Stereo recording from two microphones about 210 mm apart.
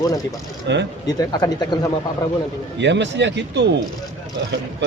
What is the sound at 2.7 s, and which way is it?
Mantra, 55° right (ahead or behind).